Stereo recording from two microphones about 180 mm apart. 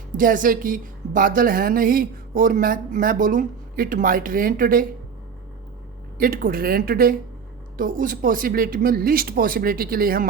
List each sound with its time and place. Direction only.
0.2 s a woman's voice: 50° right (ahead or behind)
6.1 s a woman's voice: 50° right (ahead or behind)